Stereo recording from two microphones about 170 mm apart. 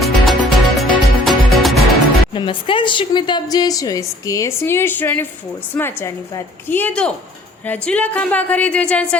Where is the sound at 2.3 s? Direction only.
30° left (ahead or behind).